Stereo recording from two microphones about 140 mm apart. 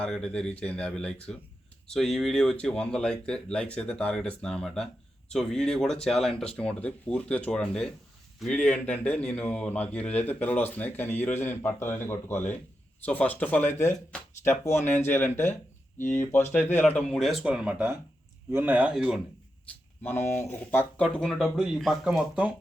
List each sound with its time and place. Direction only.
0.0 s speech: 5° left (ahead or behind)
6.3 s speech: 45° left (ahead or behind)
6.6 s speech: 10° left (ahead or behind); by 19.2 s 5° right (ahead or behind)
20.0 s speech: 15° left (ahead or behind); by 22.5 s 5° right (ahead or behind)